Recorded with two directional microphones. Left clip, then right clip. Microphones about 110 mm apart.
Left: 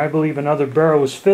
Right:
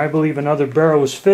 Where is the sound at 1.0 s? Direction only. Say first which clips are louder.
Right 1 dB; 35° right (ahead or behind).